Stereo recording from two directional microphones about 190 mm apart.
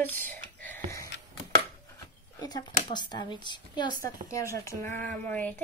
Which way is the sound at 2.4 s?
20° left (ahead or behind).